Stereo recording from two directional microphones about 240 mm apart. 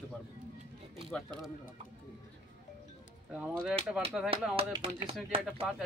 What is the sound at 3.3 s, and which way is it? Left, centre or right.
Speech, centre.